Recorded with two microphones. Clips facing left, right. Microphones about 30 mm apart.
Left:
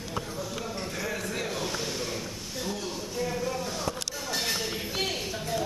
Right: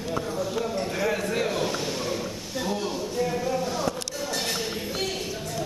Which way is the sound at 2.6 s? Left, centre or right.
Right.